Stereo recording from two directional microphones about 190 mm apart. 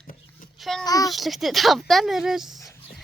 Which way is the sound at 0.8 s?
20° left (ahead or behind).